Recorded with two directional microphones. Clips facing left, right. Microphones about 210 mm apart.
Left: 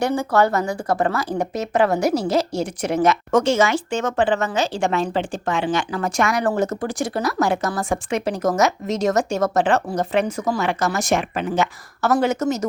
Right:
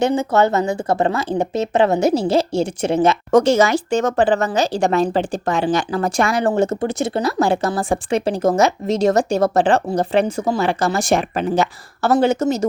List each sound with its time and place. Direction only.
0.0 s a woman's voice: 20° right (ahead or behind)